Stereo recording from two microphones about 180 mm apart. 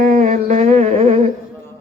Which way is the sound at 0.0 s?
45° right (ahead or behind).